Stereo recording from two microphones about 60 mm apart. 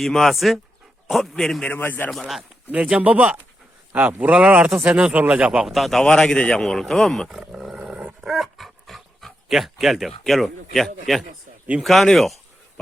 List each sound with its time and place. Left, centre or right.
0.0 s speech: centre
1.6 s a man's voice: left
2.0 s speech: centre
2.8 s speech: right
5.6 s speech: centre
6.1 s speech: centre
11.8 s a sound: centre